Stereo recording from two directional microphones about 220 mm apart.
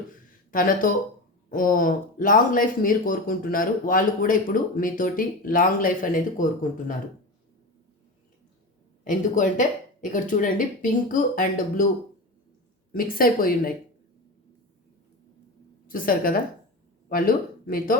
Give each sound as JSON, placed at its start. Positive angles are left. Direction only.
{"t": 0.1, "sound": "speech", "side_deg": 40}
{"t": 9.0, "sound": "speech", "side_deg": 35}
{"t": 12.9, "sound": "speech", "side_deg": 40}
{"t": 15.9, "sound": "speech", "side_deg": 40}